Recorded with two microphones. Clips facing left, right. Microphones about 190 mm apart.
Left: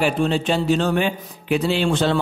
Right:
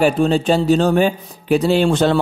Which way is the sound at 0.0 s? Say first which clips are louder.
Right 5 dB; 40° right (ahead or behind).